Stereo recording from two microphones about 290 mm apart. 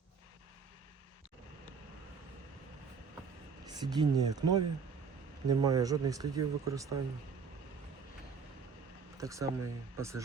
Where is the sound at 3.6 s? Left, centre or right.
Centre.